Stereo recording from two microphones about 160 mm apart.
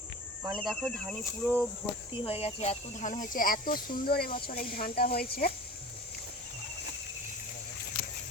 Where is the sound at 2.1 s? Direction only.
35° left (ahead or behind); by 5.5 s 75° left (ahead or behind).